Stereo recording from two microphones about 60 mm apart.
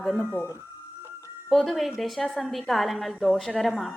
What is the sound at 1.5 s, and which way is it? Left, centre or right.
A woman's voice, centre.